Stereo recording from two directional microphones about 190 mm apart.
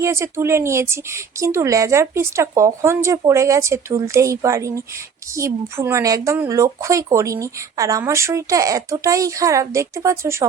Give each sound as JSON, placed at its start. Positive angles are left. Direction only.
{"t": 0.0, "sound": "speech", "side_deg": -15}